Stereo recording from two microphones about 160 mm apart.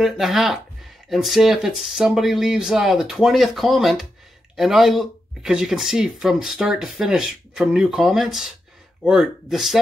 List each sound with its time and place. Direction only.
0.0 s speech: centre (ahead or behind)